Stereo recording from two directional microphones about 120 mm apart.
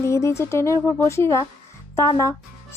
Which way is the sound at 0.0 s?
25° left (ahead or behind).